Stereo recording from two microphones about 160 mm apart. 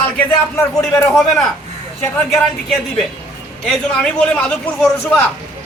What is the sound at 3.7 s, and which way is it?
A man's voice, 5° left (ahead or behind).